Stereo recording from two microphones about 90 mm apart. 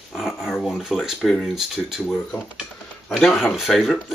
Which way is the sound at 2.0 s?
15° left (ahead or behind).